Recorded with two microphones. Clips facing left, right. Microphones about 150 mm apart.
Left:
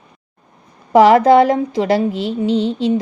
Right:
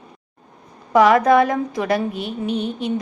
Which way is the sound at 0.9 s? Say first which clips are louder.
Left 4 dB; 25° left (ahead or behind).